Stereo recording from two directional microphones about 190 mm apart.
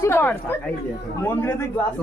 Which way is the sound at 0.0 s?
10° left (ahead or behind).